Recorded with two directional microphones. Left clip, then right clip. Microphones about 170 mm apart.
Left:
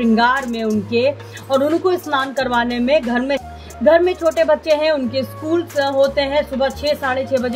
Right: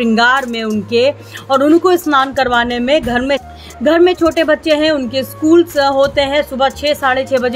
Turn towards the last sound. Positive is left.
turn(degrees=-40)  # may be behind; listen again after turning